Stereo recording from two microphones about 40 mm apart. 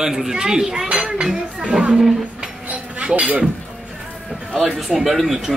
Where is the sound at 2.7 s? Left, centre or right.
Right.